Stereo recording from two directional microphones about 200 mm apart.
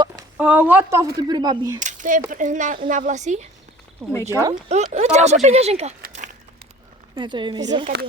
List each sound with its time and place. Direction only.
0.3 s speech: 5° right (ahead or behind)
1.8 s speech: 40° right (ahead or behind)
4.3 s speech: 15° right (ahead or behind)
4.7 s speech: 35° right (ahead or behind)
6.0 s a sound: 40° right (ahead or behind)
7.2 s speech: 25° right (ahead or behind)